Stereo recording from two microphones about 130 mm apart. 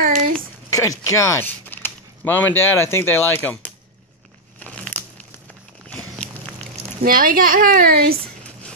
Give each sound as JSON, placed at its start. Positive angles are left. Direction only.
{"t": 0.0, "sound": "a sound", "side_deg": -90}
{"t": 0.7, "sound": "speech", "side_deg": 25}
{"t": 4.6, "sound": "crumpling", "side_deg": 10}
{"t": 5.9, "sound": "walk", "side_deg": 10}
{"t": 7.0, "sound": "a child's voice", "side_deg": -90}